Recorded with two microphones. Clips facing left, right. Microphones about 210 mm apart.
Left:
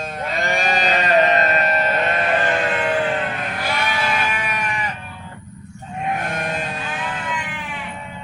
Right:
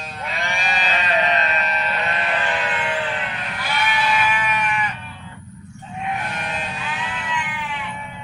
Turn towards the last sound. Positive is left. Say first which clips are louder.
# left 1 dB
turn(degrees=45)  # may be behind; listen again after turning